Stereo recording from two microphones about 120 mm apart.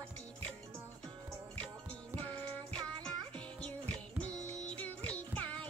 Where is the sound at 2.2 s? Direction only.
10° left (ahead or behind).